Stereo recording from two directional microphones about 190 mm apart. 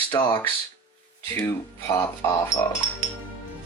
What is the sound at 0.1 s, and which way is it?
Speech, 20° left (ahead or behind).